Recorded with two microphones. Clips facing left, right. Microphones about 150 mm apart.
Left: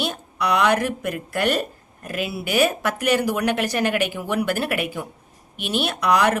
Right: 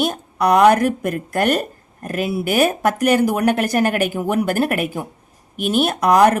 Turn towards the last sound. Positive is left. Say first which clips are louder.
# right 6 dB
turn(degrees=-45)  # may be behind; listen again after turning